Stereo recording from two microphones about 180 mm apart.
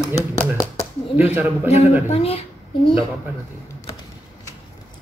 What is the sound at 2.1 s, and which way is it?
Speech, 35° left (ahead or behind).